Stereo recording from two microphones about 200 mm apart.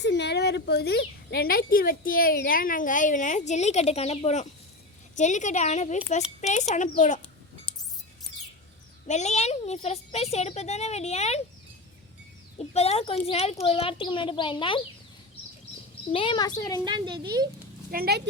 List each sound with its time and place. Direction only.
0.0 s a woman's voice: 60° left (ahead or behind); by 7.2 s 40° left (ahead or behind)
9.0 s a woman's voice: 35° left (ahead or behind)
12.5 s speech: 30° left (ahead or behind)
16.1 s speech: 25° left (ahead or behind)
16.8 s speech: 20° right (ahead or behind)
17.9 s speech: 50° right (ahead or behind)